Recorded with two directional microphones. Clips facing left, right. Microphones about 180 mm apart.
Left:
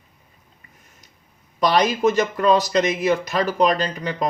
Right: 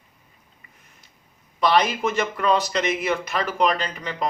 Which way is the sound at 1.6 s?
40° left (ahead or behind).